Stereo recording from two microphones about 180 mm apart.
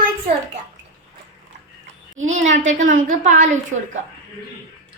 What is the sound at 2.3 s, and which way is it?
A woman's voice, 45° right (ahead or behind).